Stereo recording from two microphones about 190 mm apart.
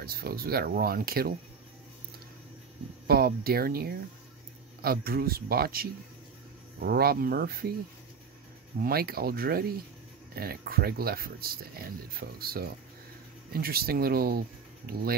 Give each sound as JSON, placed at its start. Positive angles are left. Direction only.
{"t": 0.0, "sound": "speech", "side_deg": -55}
{"t": 3.1, "sound": "speech", "side_deg": -55}
{"t": 8.8, "sound": "speech", "side_deg": -55}